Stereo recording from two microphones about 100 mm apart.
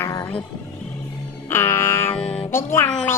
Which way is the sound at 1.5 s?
25° left (ahead or behind).